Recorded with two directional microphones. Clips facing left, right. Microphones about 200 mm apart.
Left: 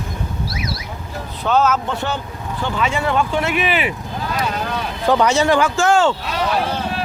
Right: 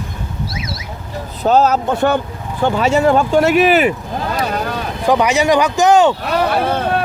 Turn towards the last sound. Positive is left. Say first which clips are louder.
# right 5 dB
turn(degrees=-60)  # may be behind; listen again after turning